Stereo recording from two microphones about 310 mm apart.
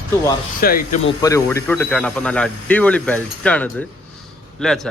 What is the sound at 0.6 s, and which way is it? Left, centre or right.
Speech, left.